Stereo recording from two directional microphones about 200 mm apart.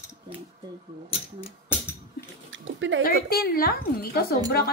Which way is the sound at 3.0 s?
50° left (ahead or behind).